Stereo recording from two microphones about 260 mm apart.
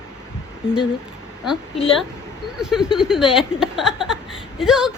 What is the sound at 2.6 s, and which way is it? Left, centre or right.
Speech, centre.